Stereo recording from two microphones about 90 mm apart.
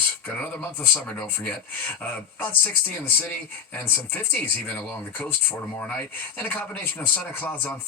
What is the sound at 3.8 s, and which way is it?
Speech, 20° left (ahead or behind).